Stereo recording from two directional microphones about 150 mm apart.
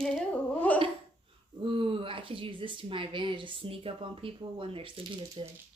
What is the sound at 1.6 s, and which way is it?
A child's voice, 35° right (ahead or behind).